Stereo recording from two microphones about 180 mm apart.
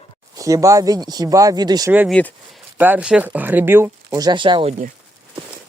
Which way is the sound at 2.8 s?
10° right (ahead or behind).